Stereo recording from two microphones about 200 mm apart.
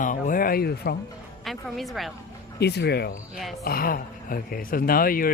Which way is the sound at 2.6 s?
55° left (ahead or behind).